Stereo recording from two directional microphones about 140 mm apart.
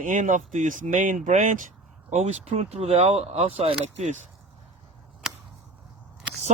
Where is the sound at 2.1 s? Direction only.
55° right (ahead or behind).